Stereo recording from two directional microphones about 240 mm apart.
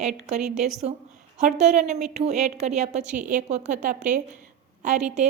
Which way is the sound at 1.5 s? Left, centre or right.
Right.